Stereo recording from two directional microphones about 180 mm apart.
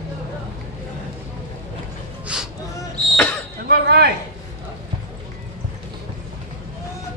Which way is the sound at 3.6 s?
60° right (ahead or behind).